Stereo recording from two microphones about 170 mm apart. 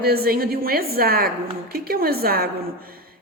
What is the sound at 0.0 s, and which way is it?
A woman's voice, 65° right (ahead or behind).